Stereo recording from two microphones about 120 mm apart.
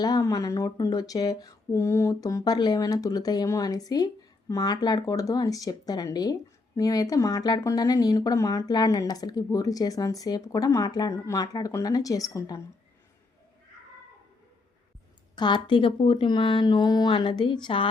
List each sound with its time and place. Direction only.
0.0 s speech: 30° left (ahead or behind)
15.4 s speech: 40° left (ahead or behind)